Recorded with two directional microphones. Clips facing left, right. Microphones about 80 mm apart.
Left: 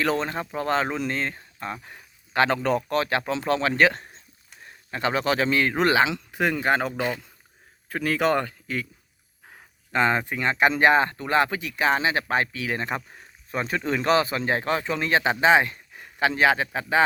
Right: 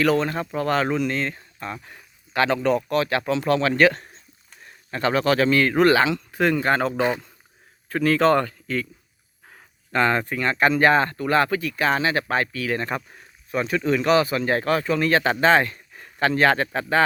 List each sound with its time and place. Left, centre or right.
0.0 s a man's voice: left; by 17.0 s centre